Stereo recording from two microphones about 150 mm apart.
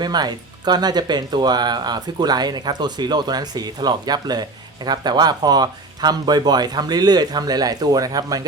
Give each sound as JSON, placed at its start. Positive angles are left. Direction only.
{"t": 0.0, "sound": "speech", "side_deg": -30}